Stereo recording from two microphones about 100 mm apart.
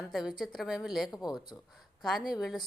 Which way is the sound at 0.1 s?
5° right (ahead or behind).